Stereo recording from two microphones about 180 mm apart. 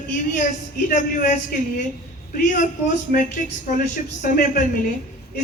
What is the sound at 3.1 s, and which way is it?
Speech, 50° left (ahead or behind).